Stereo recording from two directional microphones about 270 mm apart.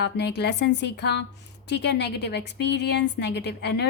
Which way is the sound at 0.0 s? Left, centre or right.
Left.